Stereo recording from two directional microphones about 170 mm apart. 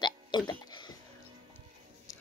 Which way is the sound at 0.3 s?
25° left (ahead or behind).